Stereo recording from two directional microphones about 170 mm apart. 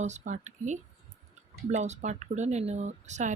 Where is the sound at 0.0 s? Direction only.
45° right (ahead or behind).